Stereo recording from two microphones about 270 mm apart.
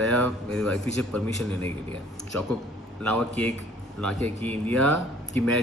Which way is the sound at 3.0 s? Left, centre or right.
Centre.